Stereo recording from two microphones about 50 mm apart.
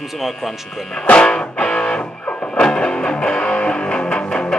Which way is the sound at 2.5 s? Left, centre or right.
Centre.